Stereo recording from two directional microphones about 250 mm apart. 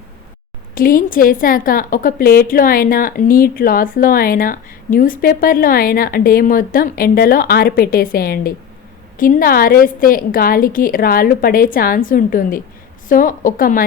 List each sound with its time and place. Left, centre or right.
0.8 s a woman's voice: left